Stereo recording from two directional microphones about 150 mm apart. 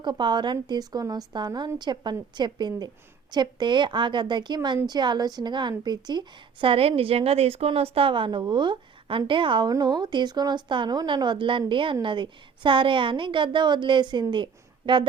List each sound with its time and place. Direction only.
0.0 s a woman's voice: 30° right (ahead or behind)